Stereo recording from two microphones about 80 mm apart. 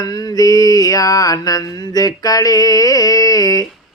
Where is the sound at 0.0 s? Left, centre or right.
Left.